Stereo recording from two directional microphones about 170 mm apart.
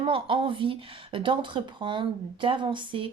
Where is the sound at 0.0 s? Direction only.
30° right (ahead or behind).